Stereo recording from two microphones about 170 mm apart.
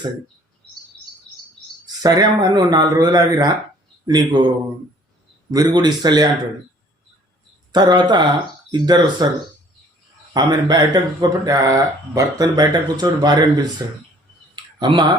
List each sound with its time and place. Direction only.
2.0 s speech: 20° right (ahead or behind)
5.5 s speech: 25° right (ahead or behind)
7.7 s speech: 25° right (ahead or behind)
10.3 s speech: 25° right (ahead or behind)
14.5 s a sound: 25° right (ahead or behind)